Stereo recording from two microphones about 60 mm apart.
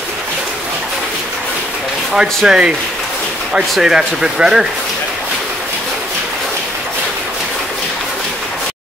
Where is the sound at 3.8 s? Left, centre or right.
Centre.